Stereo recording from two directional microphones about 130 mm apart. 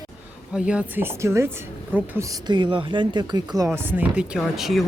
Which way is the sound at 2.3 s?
35° right (ahead or behind).